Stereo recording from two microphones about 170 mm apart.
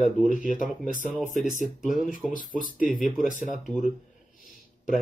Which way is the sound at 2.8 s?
50° left (ahead or behind).